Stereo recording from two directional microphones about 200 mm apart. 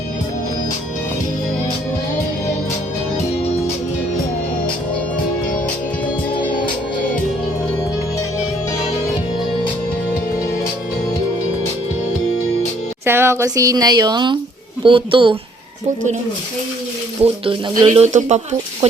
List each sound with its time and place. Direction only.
13.1 s speech: 10° right (ahead or behind)
17.2 s speech: 25° right (ahead or behind)
18.0 s speech: 35° right (ahead or behind)